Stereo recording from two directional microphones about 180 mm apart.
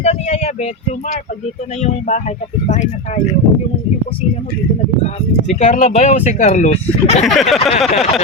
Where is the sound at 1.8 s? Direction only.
40° left (ahead or behind).